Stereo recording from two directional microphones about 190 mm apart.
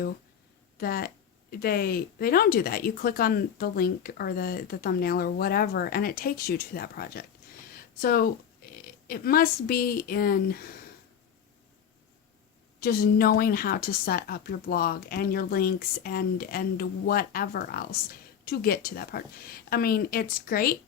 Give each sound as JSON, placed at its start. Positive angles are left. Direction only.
{"t": 0.8, "sound": "speech", "side_deg": 55}
{"t": 12.8, "sound": "speech", "side_deg": 50}